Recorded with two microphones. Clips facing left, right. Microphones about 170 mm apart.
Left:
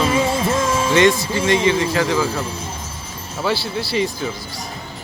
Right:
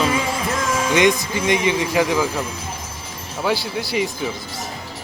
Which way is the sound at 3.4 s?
15° right (ahead or behind).